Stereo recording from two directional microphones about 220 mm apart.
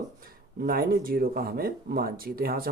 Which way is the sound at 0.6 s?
40° right (ahead or behind).